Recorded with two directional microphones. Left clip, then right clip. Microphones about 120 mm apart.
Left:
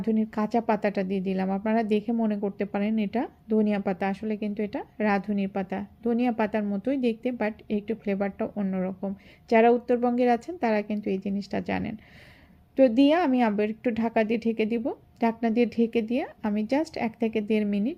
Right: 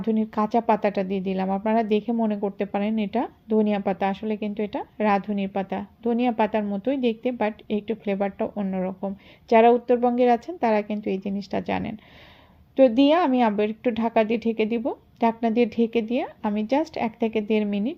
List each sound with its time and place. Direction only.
0.0 s speech: 25° right (ahead or behind)